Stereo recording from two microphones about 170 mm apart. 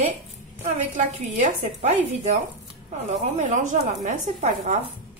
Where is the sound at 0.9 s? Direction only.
40° right (ahead or behind).